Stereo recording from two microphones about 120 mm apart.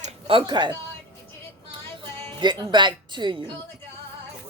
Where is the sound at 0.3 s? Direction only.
40° right (ahead or behind).